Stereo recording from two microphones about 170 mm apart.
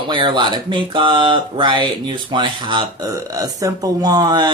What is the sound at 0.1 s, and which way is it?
Speech, 25° right (ahead or behind).